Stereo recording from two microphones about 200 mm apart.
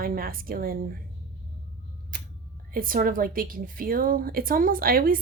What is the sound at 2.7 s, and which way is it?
A woman's voice, 45° right (ahead or behind).